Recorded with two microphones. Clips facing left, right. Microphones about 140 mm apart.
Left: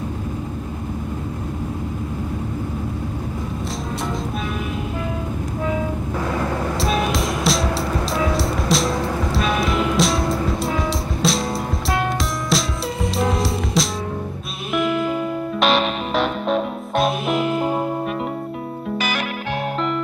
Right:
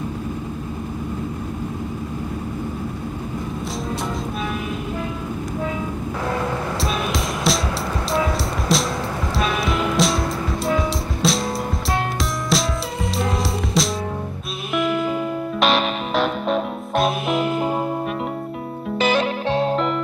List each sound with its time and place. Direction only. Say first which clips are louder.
6.8 s music: left 3 dB; centre (ahead or behind)
18.9 s music: right 8 dB; 25° right (ahead or behind)